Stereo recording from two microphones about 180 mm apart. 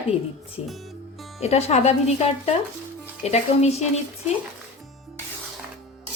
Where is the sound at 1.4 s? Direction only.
35° left (ahead or behind).